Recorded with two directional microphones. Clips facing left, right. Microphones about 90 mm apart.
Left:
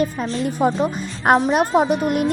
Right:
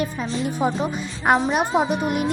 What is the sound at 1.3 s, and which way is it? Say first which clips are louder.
Speech: left 3 dB; 55° left (ahead or behind).